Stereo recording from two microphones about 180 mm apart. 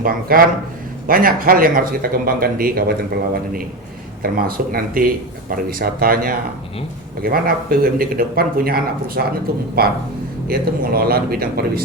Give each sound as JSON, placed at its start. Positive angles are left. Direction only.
{"t": 0.0, "sound": "speech", "side_deg": -50}